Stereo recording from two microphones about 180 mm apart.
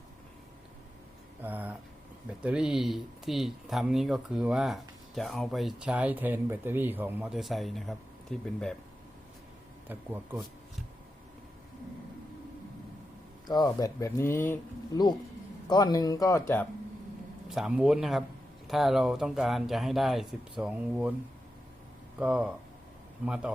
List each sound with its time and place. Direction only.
1.4 s a sound: 10° right (ahead or behind)
2.4 s speech: 5° right (ahead or behind)
9.9 s speech: 10° right (ahead or behind)
13.5 s speech: 20° left (ahead or behind)
15.6 s speech: 20° left (ahead or behind)
17.5 s speech: 5° right (ahead or behind)
22.2 s speech: 5° right (ahead or behind)